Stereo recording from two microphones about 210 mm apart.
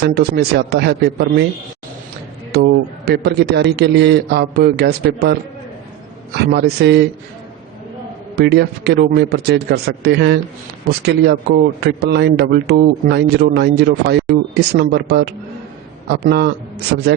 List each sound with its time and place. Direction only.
0.0 s speech: 50° right (ahead or behind)
3.1 s speech: 50° right (ahead or behind)
8.4 s speech: 50° right (ahead or behind)